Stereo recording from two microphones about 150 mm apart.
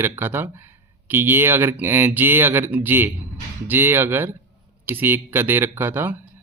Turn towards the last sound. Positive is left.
turn(degrees=-15)  # may be behind; listen again after turning